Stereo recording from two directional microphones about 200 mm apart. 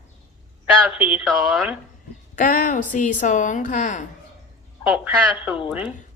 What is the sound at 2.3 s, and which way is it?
A woman's voice, 40° left (ahead or behind).